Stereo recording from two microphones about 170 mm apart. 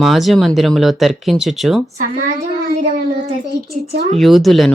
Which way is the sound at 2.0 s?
50° right (ahead or behind).